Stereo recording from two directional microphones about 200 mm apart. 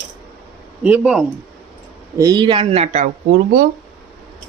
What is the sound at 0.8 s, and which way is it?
Speech, 10° right (ahead or behind).